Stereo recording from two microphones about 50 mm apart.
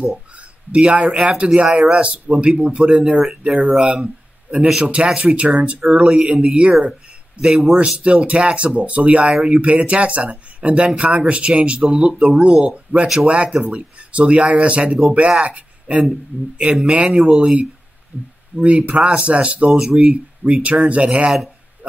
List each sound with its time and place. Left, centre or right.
0.4 s speech: right
3.2 s speech: centre
5.4 s speech: right
6.9 s speech: centre
8.0 s speech: right
9.3 s speech: centre
9.8 s speech: right
18.6 s speech: right